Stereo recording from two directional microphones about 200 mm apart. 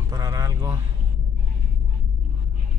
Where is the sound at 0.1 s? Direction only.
15° right (ahead or behind).